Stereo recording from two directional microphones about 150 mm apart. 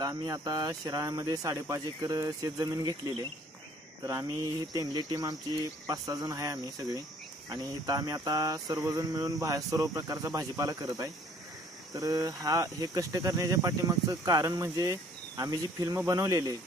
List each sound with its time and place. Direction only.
0.0 s speech: 25° right (ahead or behind)